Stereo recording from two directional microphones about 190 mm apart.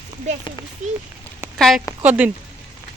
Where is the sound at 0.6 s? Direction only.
25° left (ahead or behind).